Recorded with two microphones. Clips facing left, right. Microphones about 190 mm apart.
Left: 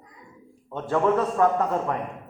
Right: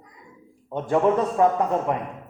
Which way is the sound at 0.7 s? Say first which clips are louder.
Right 2 dB; 20° right (ahead or behind).